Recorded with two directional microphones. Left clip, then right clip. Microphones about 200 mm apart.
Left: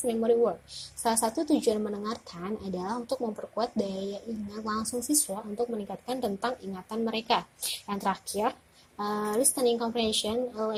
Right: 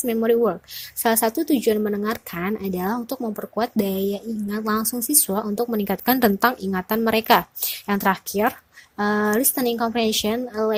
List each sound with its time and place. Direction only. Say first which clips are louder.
0.0 s speech: right 6 dB; 40° right (ahead or behind)